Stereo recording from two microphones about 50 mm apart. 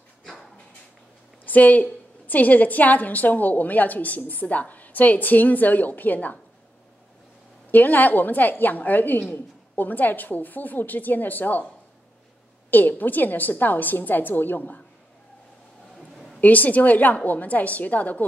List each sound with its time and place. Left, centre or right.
1.4 s a woman's voice: left
7.7 s a woman's voice: left
12.7 s a woman's voice: left
16.3 s a woman's voice: left